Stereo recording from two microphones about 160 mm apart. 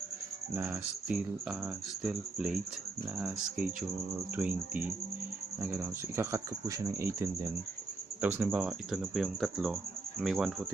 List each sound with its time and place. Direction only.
0.5 s speech: 15° right (ahead or behind)
4.4 s speech: 10° right (ahead or behind)